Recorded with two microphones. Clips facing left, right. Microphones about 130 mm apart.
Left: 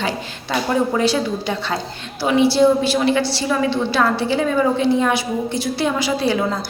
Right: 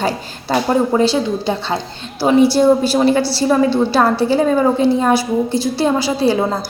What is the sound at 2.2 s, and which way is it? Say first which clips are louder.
A woman's voice: right 3 dB; 45° right (ahead or behind).